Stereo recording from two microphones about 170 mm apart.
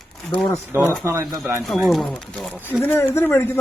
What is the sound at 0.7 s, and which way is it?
Speech, 15° right (ahead or behind).